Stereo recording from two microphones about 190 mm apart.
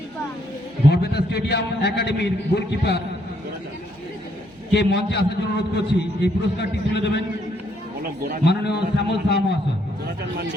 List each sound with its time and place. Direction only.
0.9 s a man's voice: 60° left (ahead or behind)
4.7 s a man's voice: 60° left (ahead or behind)
8.4 s a man's voice: 60° left (ahead or behind)